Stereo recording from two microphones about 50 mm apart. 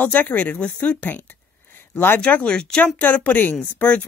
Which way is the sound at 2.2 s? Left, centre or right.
Left.